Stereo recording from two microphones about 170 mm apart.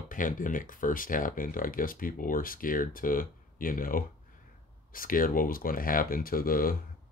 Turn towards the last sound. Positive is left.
turn(degrees=60)  # may be behind; listen again after turning